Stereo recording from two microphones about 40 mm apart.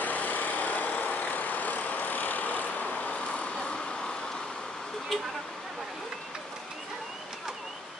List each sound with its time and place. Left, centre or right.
0.0 s vehicle: left